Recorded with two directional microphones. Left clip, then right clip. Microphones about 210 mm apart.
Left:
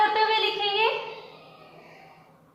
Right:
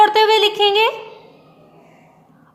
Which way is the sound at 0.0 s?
50° right (ahead or behind).